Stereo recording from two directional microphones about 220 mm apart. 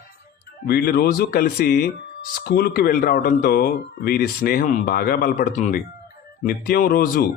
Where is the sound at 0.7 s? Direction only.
45° left (ahead or behind).